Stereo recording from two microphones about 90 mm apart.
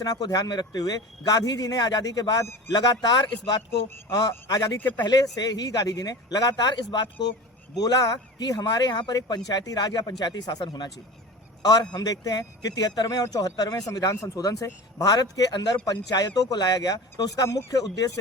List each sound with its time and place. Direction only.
0.0 s speech: 45° left (ahead or behind)
7.8 s a man's voice: 45° left (ahead or behind)